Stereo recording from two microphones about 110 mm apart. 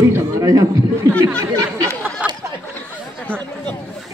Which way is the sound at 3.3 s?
10° left (ahead or behind).